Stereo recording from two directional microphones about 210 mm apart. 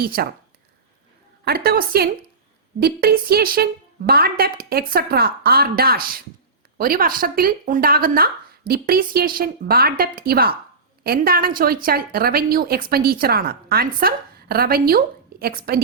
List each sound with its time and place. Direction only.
0.0 s a woman's voice: 45° right (ahead or behind)
1.5 s a woman's voice: 45° right (ahead or behind)